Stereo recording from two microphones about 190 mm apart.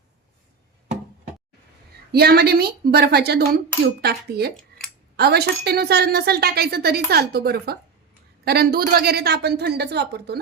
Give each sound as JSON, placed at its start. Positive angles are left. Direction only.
{"t": 2.1, "sound": "a woman's voice", "side_deg": -55}